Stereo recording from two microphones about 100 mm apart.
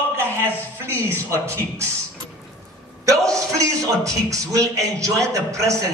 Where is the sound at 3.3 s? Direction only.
30° right (ahead or behind).